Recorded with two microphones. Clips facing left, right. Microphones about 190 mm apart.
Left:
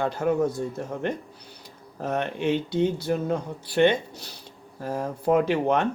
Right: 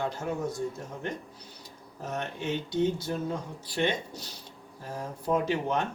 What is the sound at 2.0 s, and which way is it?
Speech, 65° left (ahead or behind).